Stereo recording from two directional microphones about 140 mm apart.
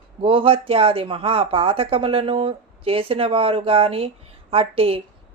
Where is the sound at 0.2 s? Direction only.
40° right (ahead or behind).